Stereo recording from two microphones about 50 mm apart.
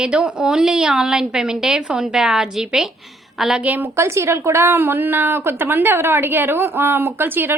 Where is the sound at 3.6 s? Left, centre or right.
Right.